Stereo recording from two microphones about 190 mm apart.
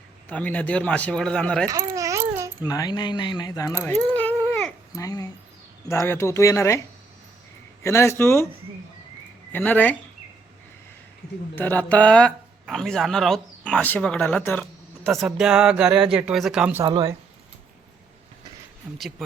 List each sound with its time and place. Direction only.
0.3 s a man's voice: 10° left (ahead or behind)
1.6 s speech: 20° right (ahead or behind)
2.0 s a sound: 15° right (ahead or behind)
2.6 s speech: 20° left (ahead or behind)
4.9 s a man's voice: 20° left (ahead or behind)
7.9 s a man's voice: 15° left (ahead or behind)
9.5 s a man's voice: 10° left (ahead or behind)
11.5 s speech: 10° left (ahead or behind)
16.8 s speech: 20° right (ahead or behind)